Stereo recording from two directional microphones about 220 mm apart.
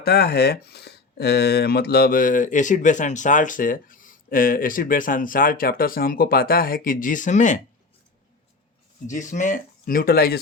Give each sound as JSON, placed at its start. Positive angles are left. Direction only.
{"t": 0.0, "sound": "speech", "side_deg": 45}
{"t": 9.0, "sound": "speech", "side_deg": 35}